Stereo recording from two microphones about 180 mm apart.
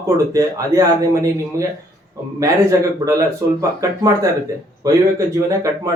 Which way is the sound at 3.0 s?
15° right (ahead or behind).